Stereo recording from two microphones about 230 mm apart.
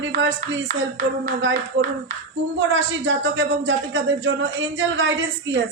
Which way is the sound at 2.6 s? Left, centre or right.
Right.